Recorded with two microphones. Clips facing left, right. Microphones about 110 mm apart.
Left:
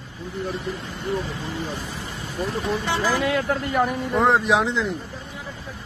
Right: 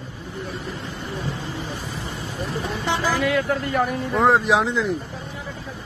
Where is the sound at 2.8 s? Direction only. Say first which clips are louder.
Right 3 dB; 20° right (ahead or behind).